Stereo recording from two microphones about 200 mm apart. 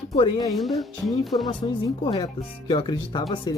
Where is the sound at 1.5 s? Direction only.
20° left (ahead or behind).